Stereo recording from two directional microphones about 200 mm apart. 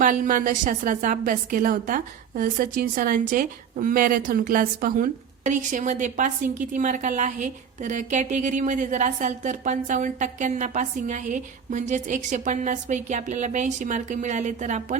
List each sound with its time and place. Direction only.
0.0 s a woman's voice: 40° right (ahead or behind)